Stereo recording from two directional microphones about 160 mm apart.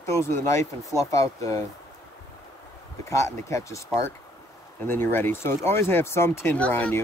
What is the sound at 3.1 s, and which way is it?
Speech, 20° left (ahead or behind).